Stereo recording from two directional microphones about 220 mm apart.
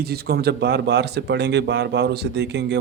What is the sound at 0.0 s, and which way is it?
Speech, 45° right (ahead or behind).